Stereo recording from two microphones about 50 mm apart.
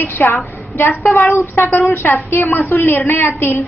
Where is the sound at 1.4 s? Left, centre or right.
Left.